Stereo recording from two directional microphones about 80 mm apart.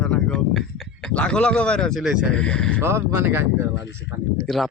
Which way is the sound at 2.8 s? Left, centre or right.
Right.